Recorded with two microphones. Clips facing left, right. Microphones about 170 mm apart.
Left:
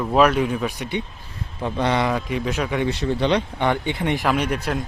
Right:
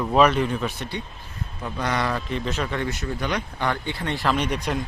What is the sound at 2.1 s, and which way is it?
Speech, 10° left (ahead or behind).